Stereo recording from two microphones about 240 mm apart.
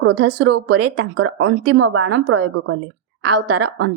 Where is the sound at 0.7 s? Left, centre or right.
Right.